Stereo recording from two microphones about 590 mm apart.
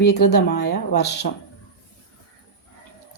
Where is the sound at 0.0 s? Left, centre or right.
Centre.